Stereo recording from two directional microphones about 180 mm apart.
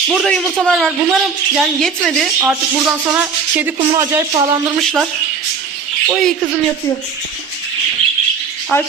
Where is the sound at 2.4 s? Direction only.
10° right (ahead or behind).